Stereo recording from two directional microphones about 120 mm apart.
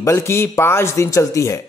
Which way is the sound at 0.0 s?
25° left (ahead or behind).